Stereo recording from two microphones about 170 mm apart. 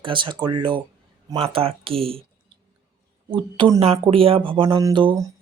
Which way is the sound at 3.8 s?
35° right (ahead or behind).